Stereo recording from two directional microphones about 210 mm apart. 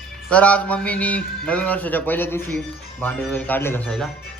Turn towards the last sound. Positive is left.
turn(degrees=5)  # may be behind; listen again after turning